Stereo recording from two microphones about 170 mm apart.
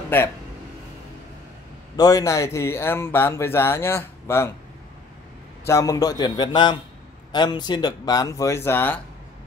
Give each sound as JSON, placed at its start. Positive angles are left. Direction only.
{"t": 2.0, "sound": "speech", "side_deg": 20}
{"t": 5.7, "sound": "speech", "side_deg": 20}